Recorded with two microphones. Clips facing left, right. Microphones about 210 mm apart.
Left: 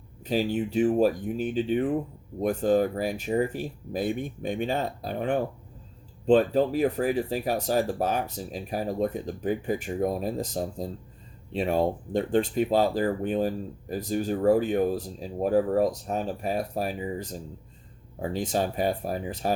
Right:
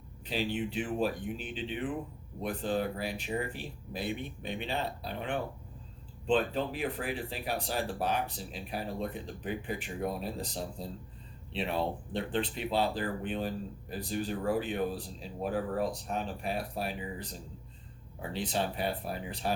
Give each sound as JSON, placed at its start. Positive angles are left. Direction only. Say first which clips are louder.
{"t": 0.3, "sound": "speech", "louder": "left 7 dB", "side_deg": 45}